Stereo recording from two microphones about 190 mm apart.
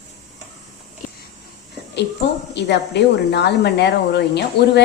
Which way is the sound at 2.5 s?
60° left (ahead or behind).